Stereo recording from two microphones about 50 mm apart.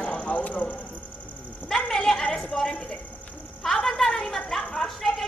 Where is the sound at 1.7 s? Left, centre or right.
Centre.